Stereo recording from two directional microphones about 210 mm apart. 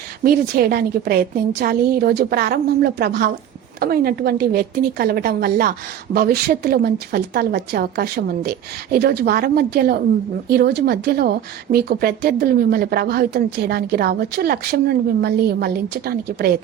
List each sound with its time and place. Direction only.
0.3 s a woman's voice: 45° right (ahead or behind)